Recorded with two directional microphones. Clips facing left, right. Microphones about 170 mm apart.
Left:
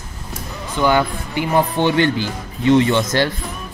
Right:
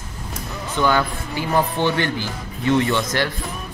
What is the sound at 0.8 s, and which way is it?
Speech, 15° left (ahead or behind).